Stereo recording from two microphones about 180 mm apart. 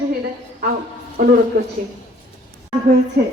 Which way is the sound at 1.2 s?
50° right (ahead or behind).